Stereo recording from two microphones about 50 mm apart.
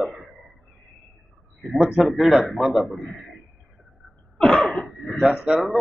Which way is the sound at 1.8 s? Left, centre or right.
Centre.